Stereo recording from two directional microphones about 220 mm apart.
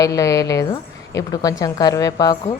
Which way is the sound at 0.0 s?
15° left (ahead or behind).